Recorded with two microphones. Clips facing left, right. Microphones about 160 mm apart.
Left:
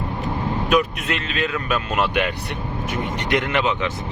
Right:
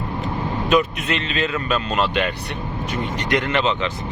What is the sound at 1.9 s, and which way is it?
Speech, 15° left (ahead or behind).